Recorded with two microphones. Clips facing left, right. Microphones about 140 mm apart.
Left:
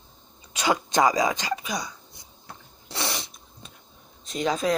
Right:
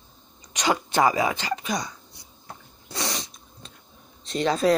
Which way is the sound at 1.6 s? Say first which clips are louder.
Right 3 dB; centre (ahead or behind).